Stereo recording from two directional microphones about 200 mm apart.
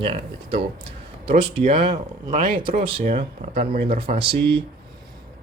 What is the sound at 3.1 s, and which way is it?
Speech, 45° right (ahead or behind).